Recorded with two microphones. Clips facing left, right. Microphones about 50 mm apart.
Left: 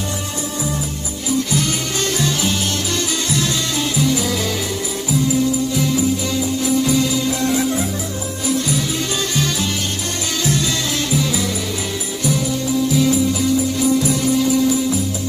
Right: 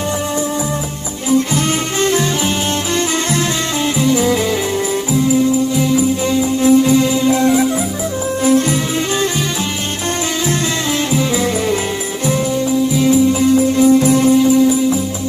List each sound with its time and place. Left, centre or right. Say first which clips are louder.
1.5 s music: right 4 dB; right
4.0 s music: right 6 dB; right
5.8 s music: right 4 dB; centre
6.6 s music: right 7 dB; right
7.5 s music: right 4 dB; centre
8.5 s music: right 6 dB; right
11.1 s music: right 4 dB; right
12.9 s music: right 5 dB; right
14.4 s music: right 5 dB; centre